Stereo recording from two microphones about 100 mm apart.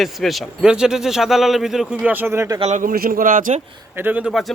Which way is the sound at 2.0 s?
20° right (ahead or behind).